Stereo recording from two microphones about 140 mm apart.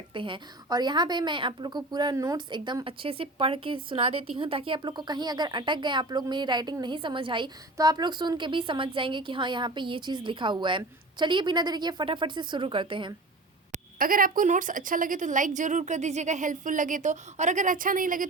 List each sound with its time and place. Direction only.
0.1 s a woman's voice: 35° right (ahead or behind)
13.7 s speech: 90° right